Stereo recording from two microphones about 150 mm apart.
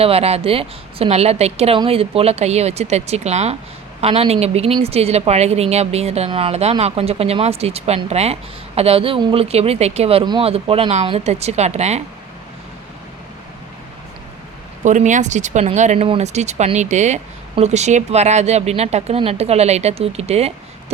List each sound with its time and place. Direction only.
0.0 s a woman's voice: 40° right (ahead or behind)
14.8 s a woman's voice: 55° right (ahead or behind)